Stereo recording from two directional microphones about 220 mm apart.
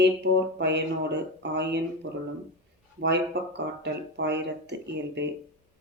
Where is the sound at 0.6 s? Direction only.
50° right (ahead or behind).